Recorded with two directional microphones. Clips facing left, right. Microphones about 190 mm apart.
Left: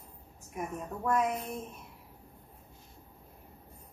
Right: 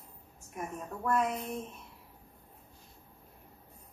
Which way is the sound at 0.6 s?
5° left (ahead or behind).